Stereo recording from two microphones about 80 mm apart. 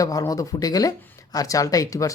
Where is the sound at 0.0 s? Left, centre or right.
Left.